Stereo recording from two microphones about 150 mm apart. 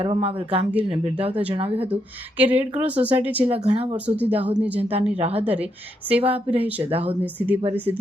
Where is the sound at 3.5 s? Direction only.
40° right (ahead or behind).